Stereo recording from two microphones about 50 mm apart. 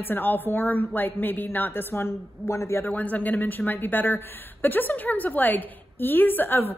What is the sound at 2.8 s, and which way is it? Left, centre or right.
A woman's voice, left.